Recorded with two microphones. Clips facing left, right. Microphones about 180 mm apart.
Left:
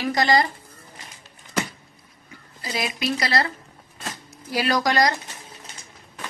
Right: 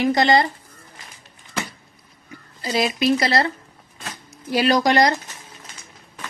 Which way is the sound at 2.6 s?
30° right (ahead or behind).